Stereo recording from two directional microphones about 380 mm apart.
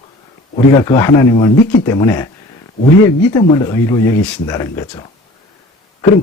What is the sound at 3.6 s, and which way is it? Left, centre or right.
Speech, centre.